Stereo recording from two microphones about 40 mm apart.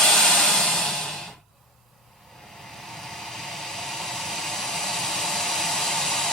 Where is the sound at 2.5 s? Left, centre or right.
Centre.